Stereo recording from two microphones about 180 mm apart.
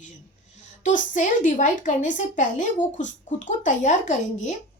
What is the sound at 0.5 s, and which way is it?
Speech, 40° left (ahead or behind).